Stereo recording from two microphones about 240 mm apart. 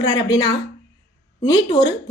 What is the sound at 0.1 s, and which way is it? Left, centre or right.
A woman's voice, centre.